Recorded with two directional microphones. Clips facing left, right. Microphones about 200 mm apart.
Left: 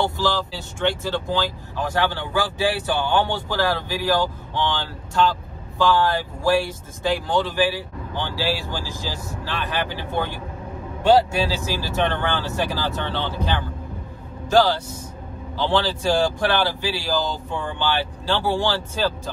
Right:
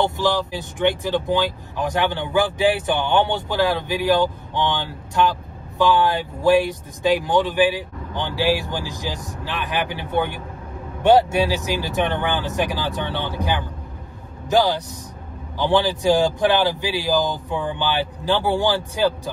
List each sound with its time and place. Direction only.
0.0 s speech: 20° right (ahead or behind)